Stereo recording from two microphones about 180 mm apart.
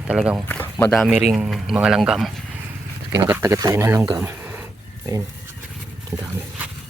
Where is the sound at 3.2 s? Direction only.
15° right (ahead or behind).